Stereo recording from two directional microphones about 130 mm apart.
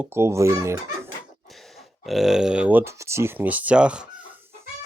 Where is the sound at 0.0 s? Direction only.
20° right (ahead or behind).